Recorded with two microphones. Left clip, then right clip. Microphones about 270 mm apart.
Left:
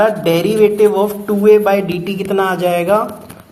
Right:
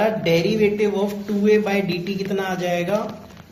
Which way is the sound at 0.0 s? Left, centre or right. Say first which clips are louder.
Left 6 dB; left.